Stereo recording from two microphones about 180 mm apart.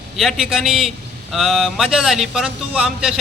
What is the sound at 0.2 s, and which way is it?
A man's voice, centre (ahead or behind).